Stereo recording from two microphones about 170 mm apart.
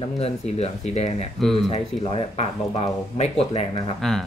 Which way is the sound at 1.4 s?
Centre (ahead or behind).